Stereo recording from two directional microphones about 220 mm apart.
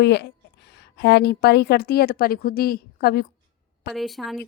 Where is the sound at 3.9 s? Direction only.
Centre (ahead or behind).